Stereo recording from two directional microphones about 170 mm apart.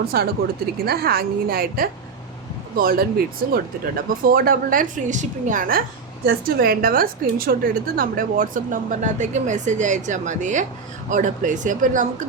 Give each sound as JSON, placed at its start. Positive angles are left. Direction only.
{"t": 0.1, "sound": "a woman's voice", "side_deg": -65}